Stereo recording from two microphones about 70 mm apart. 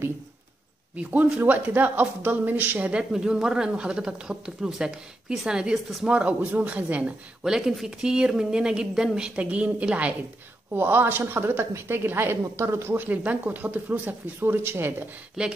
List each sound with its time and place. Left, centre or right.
0.9 s speech: right
2.9 s speech: centre
7.4 s speech: centre
10.7 s a woman's voice: right
12.9 s speech: right